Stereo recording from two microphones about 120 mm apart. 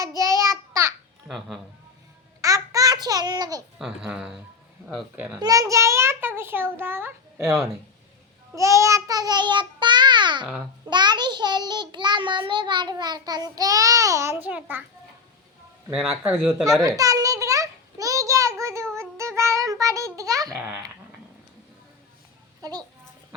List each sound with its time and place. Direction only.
0.2 s child singing: 25° right (ahead or behind)
0.7 s babbling: 25° right (ahead or behind)
2.4 s babbling: 30° right (ahead or behind)
3.8 s a child's voice: 5° right (ahead or behind)
5.4 s a child's voice: 30° right (ahead or behind)
8.5 s child singing: 25° right (ahead or behind)
15.9 s speech: 5° right (ahead or behind)
16.5 s a child's voice: 30° right (ahead or behind)
17.0 s a sound: 30° right (ahead or behind)
18.9 s child singing: 25° right (ahead or behind)